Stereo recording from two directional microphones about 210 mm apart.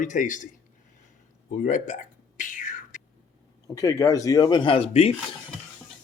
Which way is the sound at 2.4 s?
40° left (ahead or behind).